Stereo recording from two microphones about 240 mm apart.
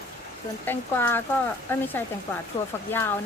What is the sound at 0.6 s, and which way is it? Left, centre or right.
Speech, centre.